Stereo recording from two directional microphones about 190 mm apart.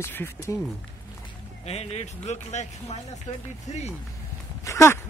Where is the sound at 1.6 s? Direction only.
35° left (ahead or behind).